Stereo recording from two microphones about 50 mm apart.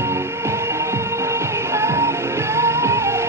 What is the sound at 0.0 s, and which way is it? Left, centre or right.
Music, right.